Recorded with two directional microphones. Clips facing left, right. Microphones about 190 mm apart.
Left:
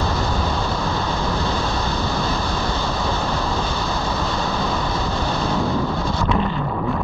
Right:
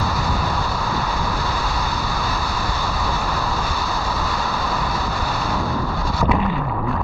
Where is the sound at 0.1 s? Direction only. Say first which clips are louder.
Left 1 dB; 5° right (ahead or behind).